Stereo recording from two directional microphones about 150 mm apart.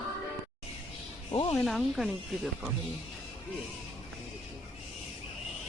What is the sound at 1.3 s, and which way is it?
Speech, 35° left (ahead or behind).